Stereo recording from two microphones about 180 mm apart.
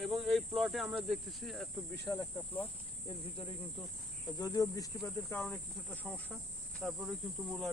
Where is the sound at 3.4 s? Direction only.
30° left (ahead or behind).